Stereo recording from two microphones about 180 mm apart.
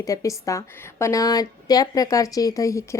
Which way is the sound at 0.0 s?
20° left (ahead or behind).